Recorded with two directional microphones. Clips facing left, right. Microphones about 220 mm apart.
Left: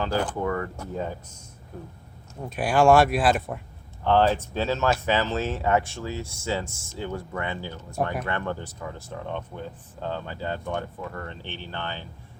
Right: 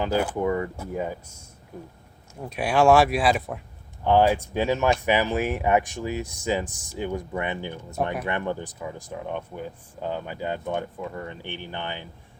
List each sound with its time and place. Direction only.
0.0 s speech: 10° right (ahead or behind)
2.4 s speech: centre (ahead or behind)
4.0 s speech: 15° right (ahead or behind)